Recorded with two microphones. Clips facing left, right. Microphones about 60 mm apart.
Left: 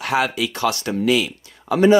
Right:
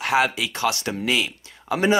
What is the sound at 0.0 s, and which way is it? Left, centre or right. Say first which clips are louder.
Speech: even; right.